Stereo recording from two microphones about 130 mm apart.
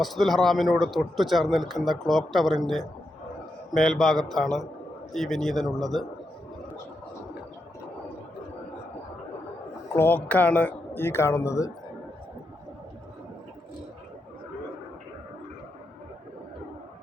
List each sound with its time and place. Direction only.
0.0 s speech: centre (ahead or behind)
9.9 s speech: 15° left (ahead or behind)